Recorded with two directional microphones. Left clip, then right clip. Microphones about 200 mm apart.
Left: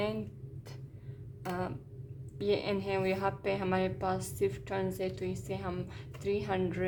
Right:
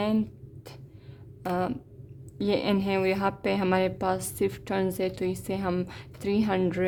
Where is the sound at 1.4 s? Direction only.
45° right (ahead or behind).